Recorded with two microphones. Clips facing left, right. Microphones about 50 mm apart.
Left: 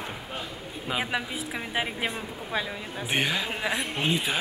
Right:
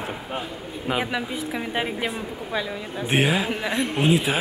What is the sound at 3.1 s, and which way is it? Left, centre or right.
Speech, centre.